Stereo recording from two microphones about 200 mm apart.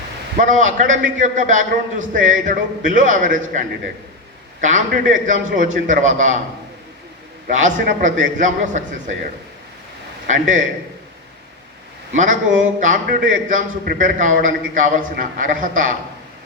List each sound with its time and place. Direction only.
0.3 s a man's voice: 40° right (ahead or behind)
4.6 s a man's voice: 40° right (ahead or behind)
7.4 s a man's voice: 40° right (ahead or behind)
10.2 s a man's voice: 40° right (ahead or behind)
12.1 s a man's voice: 40° right (ahead or behind)